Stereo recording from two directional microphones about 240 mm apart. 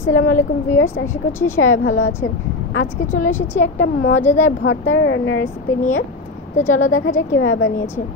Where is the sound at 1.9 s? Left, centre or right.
Left.